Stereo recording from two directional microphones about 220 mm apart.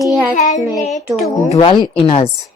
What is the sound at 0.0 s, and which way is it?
Speech, centre (ahead or behind).